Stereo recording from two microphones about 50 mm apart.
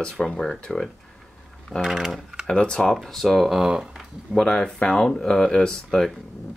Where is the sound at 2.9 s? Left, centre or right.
Centre.